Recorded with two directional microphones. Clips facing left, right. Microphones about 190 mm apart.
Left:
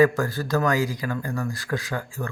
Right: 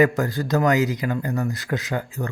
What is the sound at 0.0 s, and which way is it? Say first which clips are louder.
Speech: even; 20° right (ahead or behind).